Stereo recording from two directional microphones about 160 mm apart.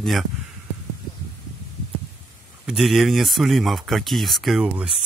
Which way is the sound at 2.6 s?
Centre (ahead or behind).